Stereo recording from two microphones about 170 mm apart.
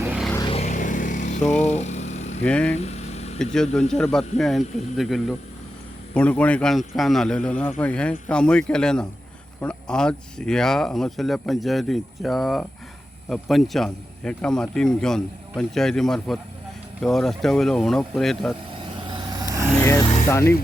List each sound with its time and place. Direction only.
0.5 s vehicle: 45° left (ahead or behind)
2.4 s speech: 5° left (ahead or behind)
2.7 s vehicle: 40° left (ahead or behind)
3.9 s speech: 5° left (ahead or behind)
18.9 s vehicle: 25° right (ahead or behind)
19.8 s rub: 20° left (ahead or behind)
20.2 s speech: 15° left (ahead or behind)